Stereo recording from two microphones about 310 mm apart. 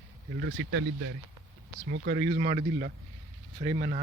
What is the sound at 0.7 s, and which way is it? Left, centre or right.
Speech, right.